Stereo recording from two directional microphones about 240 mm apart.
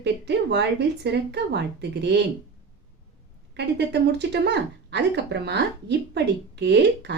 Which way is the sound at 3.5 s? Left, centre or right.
Right.